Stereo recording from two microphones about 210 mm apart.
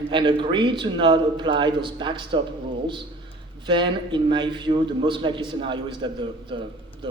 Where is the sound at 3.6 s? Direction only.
20° right (ahead or behind).